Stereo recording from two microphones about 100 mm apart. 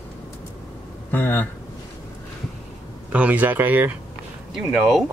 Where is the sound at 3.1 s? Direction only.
15° right (ahead or behind).